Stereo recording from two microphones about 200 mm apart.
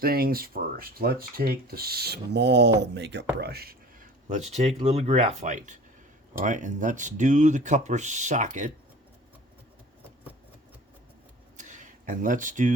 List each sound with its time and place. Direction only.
0.0 s speech: 50° right (ahead or behind)
4.3 s speech: 35° right (ahead or behind)
11.5 s a sound: 40° right (ahead or behind)